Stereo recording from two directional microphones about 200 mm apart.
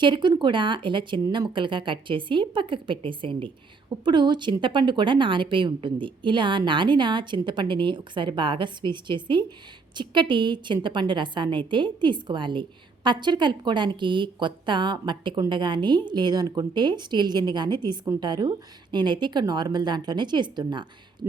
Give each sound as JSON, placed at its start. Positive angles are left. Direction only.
{"t": 0.0, "sound": "a woman's voice", "side_deg": -25}